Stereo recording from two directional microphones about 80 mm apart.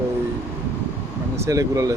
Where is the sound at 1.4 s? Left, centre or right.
Right.